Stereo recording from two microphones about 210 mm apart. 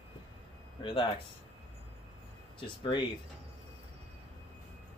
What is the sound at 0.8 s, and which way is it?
Speech, 25° left (ahead or behind).